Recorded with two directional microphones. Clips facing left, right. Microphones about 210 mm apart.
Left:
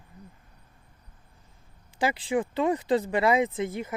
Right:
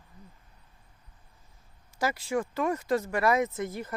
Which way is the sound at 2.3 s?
15° left (ahead or behind).